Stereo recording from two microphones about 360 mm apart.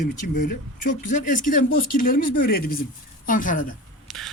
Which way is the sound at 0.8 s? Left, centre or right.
Left.